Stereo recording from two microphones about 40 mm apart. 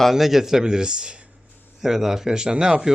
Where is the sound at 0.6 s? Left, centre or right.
Centre.